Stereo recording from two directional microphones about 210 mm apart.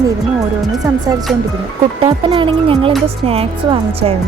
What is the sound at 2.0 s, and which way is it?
A woman's voice, 25° right (ahead or behind).